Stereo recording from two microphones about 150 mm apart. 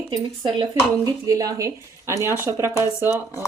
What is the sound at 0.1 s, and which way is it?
Speech, 25° right (ahead or behind).